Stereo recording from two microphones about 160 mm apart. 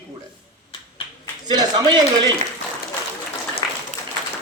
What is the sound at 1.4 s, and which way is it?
Speech, 25° right (ahead or behind).